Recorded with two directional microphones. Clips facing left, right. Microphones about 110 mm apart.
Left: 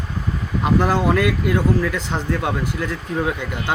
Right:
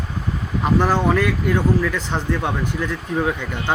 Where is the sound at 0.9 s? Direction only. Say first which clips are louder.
Even; 10° left (ahead or behind).